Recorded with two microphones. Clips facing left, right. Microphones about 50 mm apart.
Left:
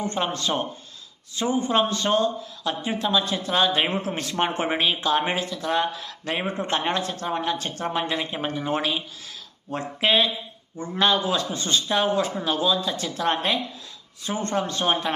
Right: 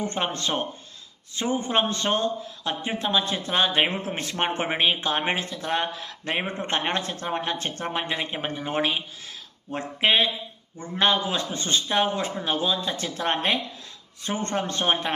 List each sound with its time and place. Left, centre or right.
0.0 s speech: right